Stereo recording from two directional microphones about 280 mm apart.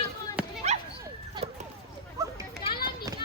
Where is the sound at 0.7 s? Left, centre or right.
Right.